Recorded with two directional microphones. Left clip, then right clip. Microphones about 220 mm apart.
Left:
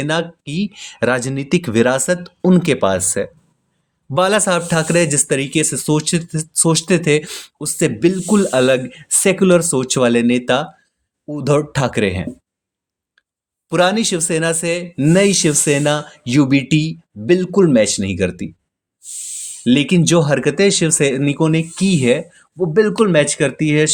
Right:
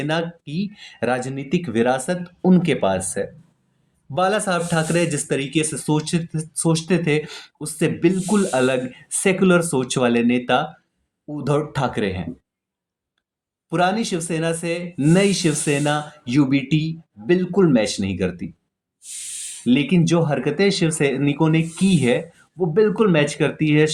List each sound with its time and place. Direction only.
0.0 s speech: 45° left (ahead or behind)
13.7 s speech: 50° left (ahead or behind)
19.6 s speech: 50° left (ahead or behind)